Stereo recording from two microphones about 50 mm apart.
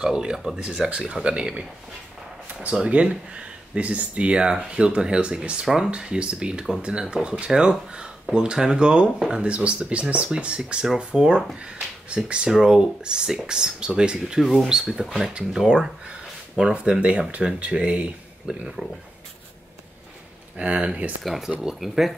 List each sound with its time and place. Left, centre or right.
0.0 s speech: centre
0.8 s speech: centre
2.4 s a sound: right
2.9 s speech: right
20.5 s speech: right
21.2 s speech: centre